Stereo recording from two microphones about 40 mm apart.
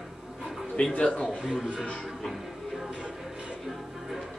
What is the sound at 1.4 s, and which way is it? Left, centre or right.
Speech, right.